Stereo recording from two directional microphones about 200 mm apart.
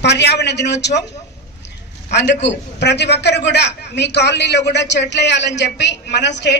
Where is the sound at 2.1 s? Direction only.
60° left (ahead or behind).